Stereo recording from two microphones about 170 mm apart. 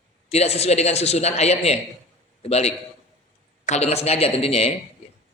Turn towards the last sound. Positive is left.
turn(degrees=35)  # may be behind; listen again after turning